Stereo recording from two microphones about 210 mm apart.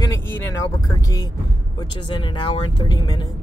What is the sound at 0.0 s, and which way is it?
Speech, 15° left (ahead or behind).